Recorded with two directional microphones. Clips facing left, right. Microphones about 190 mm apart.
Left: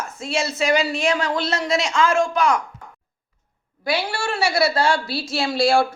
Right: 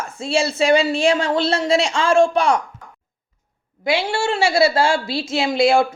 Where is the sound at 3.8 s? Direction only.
25° right (ahead or behind).